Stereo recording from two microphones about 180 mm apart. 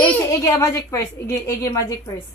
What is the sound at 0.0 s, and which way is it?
A woman's voice, 10° left (ahead or behind).